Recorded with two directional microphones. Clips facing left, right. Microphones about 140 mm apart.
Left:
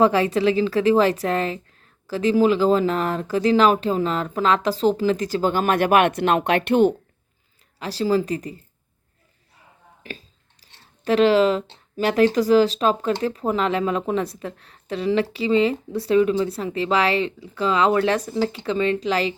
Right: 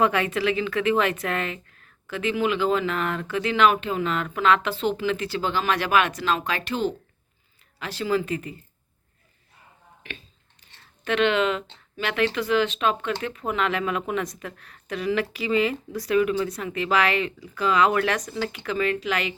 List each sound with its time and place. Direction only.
0.0 s a woman's voice: 30° left (ahead or behind); by 6.9 s 60° left (ahead or behind)
7.8 s a woman's voice: 35° left (ahead or behind)
10.0 s a sound: 35° left (ahead or behind)
11.9 s a woman's voice: 40° left (ahead or behind)